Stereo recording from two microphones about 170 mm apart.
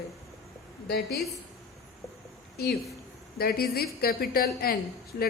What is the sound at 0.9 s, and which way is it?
Speech, 75° left (ahead or behind).